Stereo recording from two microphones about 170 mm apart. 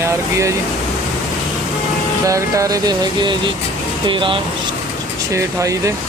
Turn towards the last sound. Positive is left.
turn(degrees=-20)  # may be behind; listen again after turning